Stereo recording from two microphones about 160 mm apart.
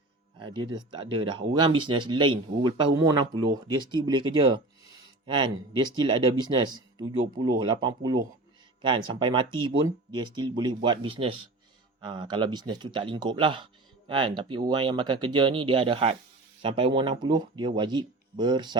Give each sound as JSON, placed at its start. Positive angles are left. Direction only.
{"t": 0.3, "sound": "speech", "side_deg": -30}